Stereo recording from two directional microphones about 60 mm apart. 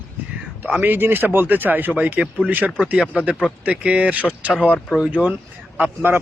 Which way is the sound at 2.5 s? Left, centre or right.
Right.